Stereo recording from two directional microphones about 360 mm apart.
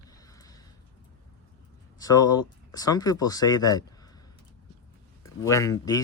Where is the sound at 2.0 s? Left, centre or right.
Centre.